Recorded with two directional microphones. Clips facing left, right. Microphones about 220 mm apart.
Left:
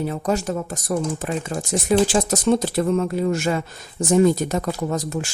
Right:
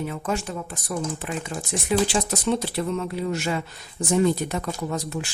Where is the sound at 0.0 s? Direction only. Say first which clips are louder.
Left 5 dB; 40° left (ahead or behind).